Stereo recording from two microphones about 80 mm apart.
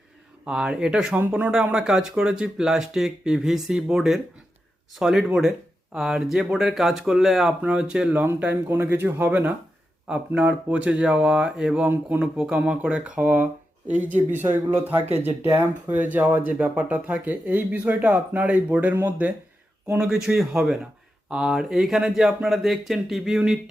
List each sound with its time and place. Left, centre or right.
0.4 s speech: centre
7.6 s speech: centre
8.1 s speech: right
20.0 s speech: centre